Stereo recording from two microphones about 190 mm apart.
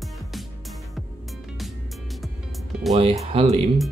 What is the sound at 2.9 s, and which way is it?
Speech, 30° right (ahead or behind).